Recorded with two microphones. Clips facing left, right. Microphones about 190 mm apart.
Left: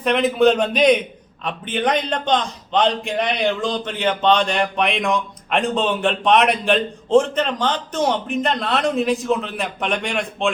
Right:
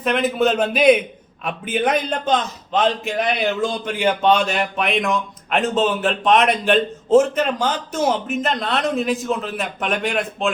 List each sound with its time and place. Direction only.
0.0 s a man's voice: centre (ahead or behind)